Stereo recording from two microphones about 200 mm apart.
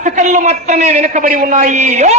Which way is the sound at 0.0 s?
40° right (ahead or behind).